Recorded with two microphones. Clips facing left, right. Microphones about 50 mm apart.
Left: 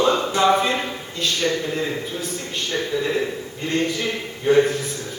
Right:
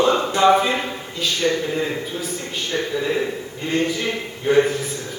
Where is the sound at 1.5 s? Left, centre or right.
Centre.